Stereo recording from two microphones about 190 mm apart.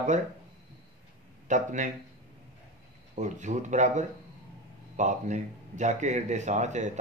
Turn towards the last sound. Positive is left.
turn(degrees=-40)  # may be behind; listen again after turning